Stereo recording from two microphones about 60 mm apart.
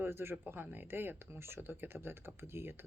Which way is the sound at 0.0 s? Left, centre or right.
Right.